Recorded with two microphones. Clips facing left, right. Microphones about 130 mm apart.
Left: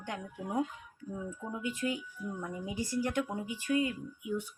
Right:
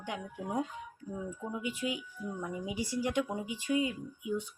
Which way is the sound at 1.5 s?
10° right (ahead or behind).